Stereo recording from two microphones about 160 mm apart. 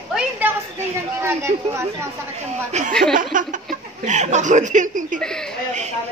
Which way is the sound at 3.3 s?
55° right (ahead or behind).